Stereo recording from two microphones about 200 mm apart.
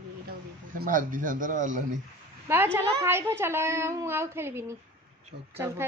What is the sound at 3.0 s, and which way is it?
Speech, 10° right (ahead or behind).